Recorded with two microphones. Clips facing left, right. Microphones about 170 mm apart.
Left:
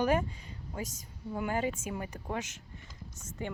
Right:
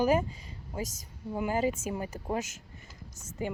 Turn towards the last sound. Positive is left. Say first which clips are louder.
# right 4 dB
turn(degrees=-10)  # may be behind; listen again after turning